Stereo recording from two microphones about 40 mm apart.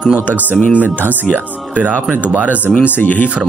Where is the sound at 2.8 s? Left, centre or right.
Left.